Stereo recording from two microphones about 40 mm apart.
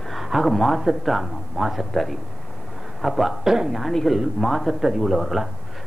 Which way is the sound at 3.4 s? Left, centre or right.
Centre.